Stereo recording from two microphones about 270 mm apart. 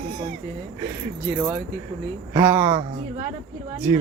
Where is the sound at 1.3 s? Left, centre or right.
Centre.